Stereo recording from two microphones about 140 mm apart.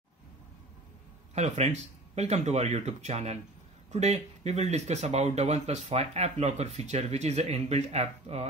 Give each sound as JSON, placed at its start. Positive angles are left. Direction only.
{"t": 1.3, "sound": "speech", "side_deg": -50}